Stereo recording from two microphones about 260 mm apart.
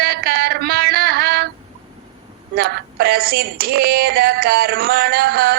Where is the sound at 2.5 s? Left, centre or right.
Right.